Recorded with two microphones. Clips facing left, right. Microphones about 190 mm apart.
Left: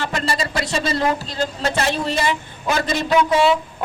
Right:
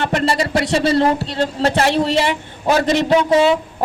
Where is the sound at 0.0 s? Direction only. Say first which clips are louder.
Right 5 dB; 65° right (ahead or behind).